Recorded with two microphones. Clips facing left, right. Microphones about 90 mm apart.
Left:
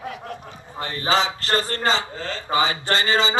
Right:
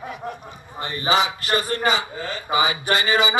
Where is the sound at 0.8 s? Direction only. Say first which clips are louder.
Even; 55° left (ahead or behind).